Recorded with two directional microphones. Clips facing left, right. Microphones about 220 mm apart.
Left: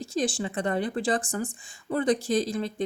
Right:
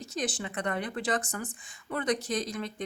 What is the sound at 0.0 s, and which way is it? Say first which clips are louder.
Speech: left 6 dB; 30° left (ahead or behind).